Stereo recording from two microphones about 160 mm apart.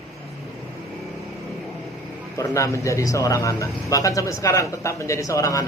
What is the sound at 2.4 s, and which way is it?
Speech, 20° left (ahead or behind).